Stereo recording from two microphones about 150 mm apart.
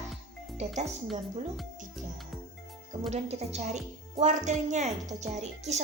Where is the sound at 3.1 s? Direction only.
45° right (ahead or behind).